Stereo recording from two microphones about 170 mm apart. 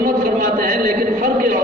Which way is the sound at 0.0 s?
60° right (ahead or behind).